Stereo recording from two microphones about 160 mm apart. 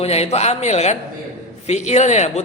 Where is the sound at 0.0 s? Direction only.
40° left (ahead or behind).